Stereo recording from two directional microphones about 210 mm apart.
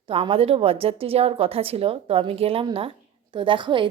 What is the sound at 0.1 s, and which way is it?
A woman's voice, 25° right (ahead or behind).